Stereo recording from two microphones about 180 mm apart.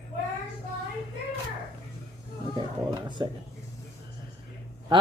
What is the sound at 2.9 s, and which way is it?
Speech, 25° right (ahead or behind).